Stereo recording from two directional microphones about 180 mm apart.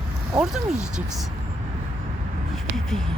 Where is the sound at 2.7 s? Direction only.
Centre (ahead or behind).